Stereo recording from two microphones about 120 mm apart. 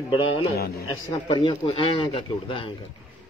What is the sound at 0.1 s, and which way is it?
A man's voice, 50° left (ahead or behind).